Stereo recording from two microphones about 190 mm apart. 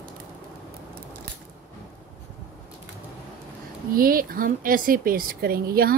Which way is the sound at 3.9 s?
50° right (ahead or behind).